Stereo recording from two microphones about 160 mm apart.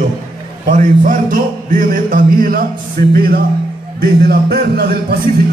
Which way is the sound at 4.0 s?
90° right.